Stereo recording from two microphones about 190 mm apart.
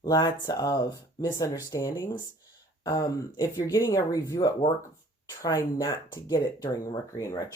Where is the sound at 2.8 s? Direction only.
20° left (ahead or behind).